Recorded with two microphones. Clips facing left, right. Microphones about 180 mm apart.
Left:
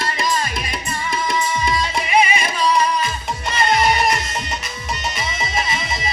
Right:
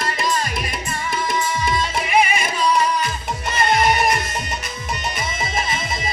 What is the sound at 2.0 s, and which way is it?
Music, 55° right (ahead or behind).